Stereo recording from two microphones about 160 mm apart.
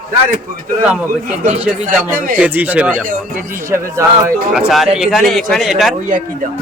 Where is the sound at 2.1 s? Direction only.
55° right (ahead or behind).